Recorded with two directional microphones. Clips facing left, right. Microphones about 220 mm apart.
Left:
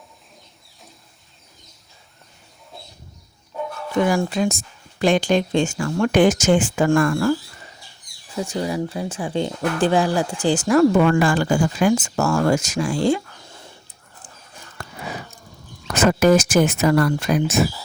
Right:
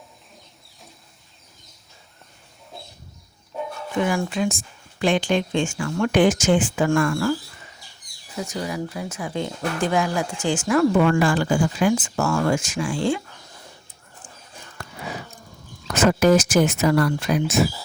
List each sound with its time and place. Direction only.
4.0 s speech: 35° left (ahead or behind)
7.1 s a sound: 35° left (ahead or behind)
8.4 s speech: 30° left (ahead or behind)
11.2 s speech: 50° left (ahead or behind)
16.2 s speech: 55° left (ahead or behind)